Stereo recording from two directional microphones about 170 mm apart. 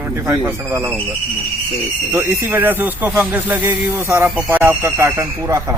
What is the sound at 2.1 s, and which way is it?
Speech, 15° right (ahead or behind).